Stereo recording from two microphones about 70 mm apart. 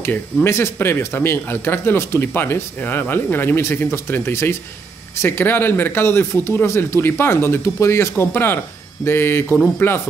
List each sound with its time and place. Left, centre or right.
0.0 s speech: left